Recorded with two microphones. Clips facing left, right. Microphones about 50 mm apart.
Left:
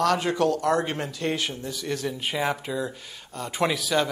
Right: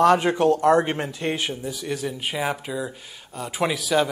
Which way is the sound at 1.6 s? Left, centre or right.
Centre.